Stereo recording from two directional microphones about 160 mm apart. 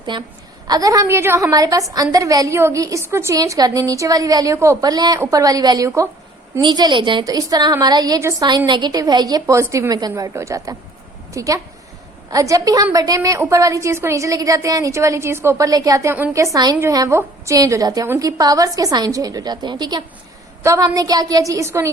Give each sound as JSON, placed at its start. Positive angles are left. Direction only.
{"t": 0.0, "sound": "a woman's voice", "side_deg": -30}